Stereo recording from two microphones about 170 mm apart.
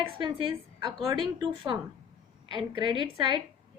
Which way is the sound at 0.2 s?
30° right (ahead or behind).